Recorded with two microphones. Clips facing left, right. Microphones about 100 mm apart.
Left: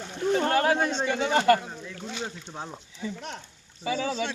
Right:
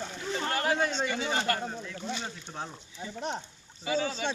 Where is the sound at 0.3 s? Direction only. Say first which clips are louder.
Left 8 dB; 50° left (ahead or behind).